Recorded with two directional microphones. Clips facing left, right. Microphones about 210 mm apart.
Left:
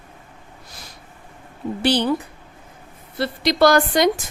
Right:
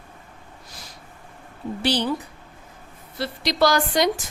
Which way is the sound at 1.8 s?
55° left (ahead or behind).